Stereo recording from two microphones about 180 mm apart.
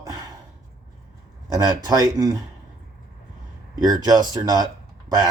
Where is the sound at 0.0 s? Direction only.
20° right (ahead or behind).